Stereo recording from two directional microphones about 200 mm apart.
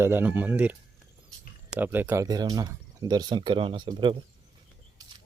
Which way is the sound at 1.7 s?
10° right (ahead or behind).